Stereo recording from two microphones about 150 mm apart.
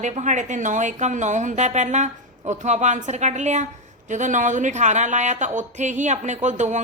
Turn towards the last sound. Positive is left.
turn(degrees=-55)  # may be behind; listen again after turning